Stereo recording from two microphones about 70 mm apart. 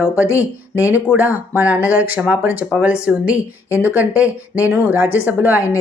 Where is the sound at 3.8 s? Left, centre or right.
Right.